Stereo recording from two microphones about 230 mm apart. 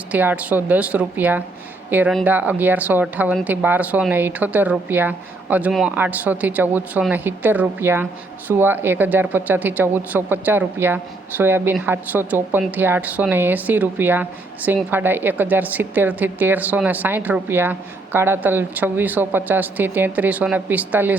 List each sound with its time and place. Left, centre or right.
0.1 s speech: centre